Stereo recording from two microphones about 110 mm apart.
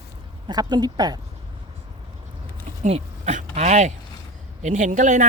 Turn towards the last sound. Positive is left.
turn(degrees=-90)